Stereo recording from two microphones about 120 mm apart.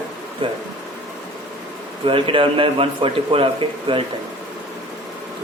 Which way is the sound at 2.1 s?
45° right (ahead or behind).